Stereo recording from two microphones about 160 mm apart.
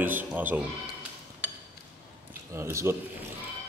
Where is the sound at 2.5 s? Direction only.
15° right (ahead or behind).